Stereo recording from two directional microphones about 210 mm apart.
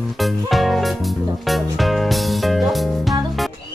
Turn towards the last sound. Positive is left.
turn(degrees=0)  # may be behind; listen again after turning